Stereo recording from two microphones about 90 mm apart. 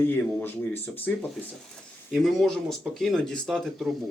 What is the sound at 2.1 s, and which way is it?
Speech, 5° left (ahead or behind).